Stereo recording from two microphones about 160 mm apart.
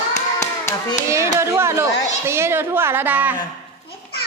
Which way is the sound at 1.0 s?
20° right (ahead or behind).